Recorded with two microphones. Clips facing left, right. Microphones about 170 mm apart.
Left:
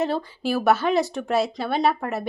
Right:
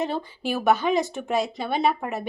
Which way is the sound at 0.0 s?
Centre (ahead or behind).